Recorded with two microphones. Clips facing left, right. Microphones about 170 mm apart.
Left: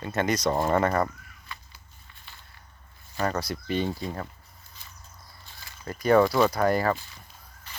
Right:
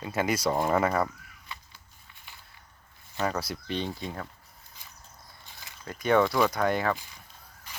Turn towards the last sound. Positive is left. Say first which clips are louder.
# even
turn(degrees=-10)  # may be behind; listen again after turning